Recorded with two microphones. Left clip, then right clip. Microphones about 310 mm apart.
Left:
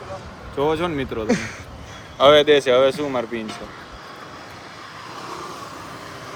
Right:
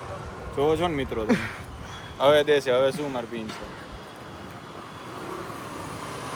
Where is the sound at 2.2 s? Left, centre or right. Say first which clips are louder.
Left 6 dB; left.